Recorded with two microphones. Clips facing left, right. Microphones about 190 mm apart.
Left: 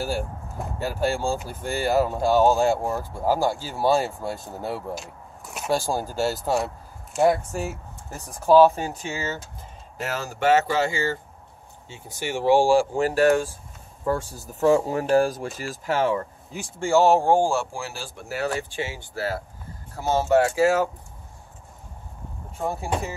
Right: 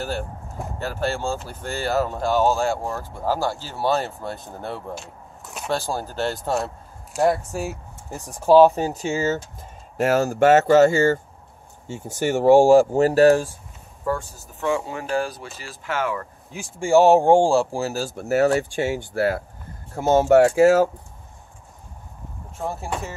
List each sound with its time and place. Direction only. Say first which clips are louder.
0.7 s speech: left 1 dB; 10° left (ahead or behind)
8.7 s speech: right 6 dB; 35° right (ahead or behind)
14.0 s speech: even; 30° left (ahead or behind)
16.8 s speech: right 4 dB; 15° right (ahead or behind); by 20.9 s 45° right (ahead or behind)
22.6 s speech: left 1 dB; centre (ahead or behind)
22.8 s speech: left 2 dB; 15° left (ahead or behind)